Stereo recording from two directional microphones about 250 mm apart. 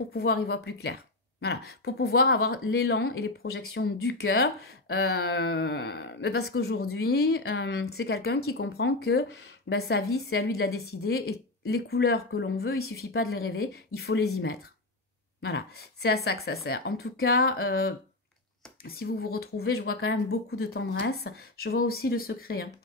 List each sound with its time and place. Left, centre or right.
0.1 s speech: left
15.4 s speech: left